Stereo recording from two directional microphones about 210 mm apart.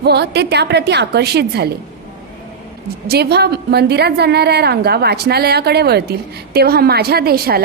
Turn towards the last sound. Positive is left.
turn(degrees=-45)  # may be behind; listen again after turning